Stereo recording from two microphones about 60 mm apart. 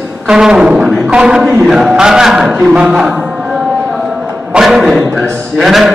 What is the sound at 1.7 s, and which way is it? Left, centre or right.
Speech, centre.